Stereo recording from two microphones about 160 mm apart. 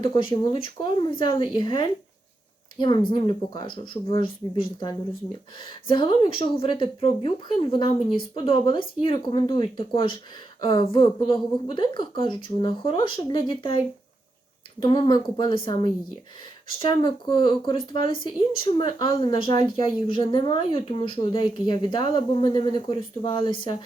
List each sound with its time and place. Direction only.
0.0 s a woman's voice: 30° left (ahead or behind)